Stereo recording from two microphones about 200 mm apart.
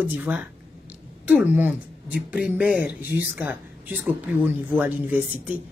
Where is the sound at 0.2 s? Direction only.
10° right (ahead or behind).